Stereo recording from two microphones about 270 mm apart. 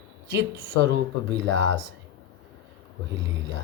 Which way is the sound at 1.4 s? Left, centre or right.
Right.